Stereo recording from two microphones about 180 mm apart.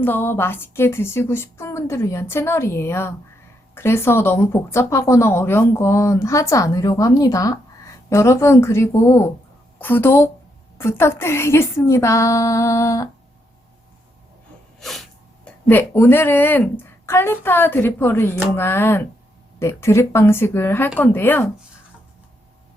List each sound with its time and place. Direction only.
0.0 s speech: 10° left (ahead or behind)
14.8 s sneeze: centre (ahead or behind)
15.7 s speech: 10° left (ahead or behind)